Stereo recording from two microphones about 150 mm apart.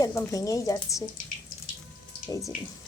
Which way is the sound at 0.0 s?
20° left (ahead or behind).